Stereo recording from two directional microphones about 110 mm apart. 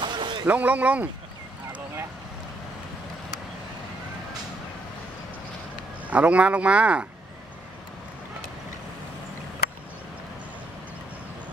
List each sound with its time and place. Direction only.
0.0 s a sound: 45° right (ahead or behind)
0.5 s speech: 15° right (ahead or behind)
6.0 s speech: 10° right (ahead or behind)